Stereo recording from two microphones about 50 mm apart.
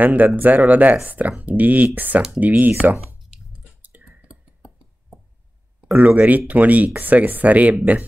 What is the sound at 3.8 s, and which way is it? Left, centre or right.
Clicking, right.